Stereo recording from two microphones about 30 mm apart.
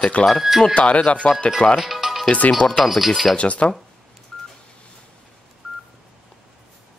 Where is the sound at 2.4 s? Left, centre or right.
Left.